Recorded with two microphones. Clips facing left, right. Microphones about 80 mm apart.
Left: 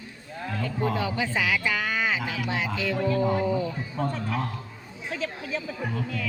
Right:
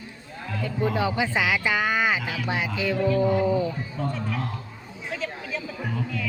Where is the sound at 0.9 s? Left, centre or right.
Centre.